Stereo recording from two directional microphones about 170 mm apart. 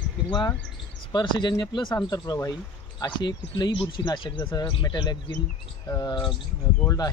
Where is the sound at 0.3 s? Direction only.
25° left (ahead or behind).